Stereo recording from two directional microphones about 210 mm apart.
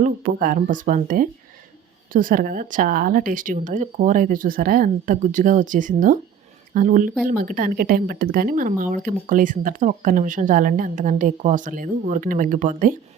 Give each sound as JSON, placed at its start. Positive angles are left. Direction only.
{"t": 0.0, "sound": "speech", "side_deg": -40}